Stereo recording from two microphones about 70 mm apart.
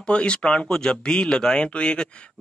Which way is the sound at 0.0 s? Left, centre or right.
Centre.